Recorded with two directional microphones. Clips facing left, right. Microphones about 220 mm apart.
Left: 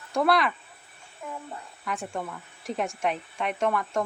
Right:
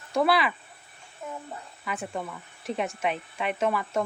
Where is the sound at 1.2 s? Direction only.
20° right (ahead or behind).